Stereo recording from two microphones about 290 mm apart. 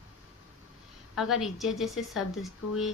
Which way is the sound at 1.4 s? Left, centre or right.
Centre.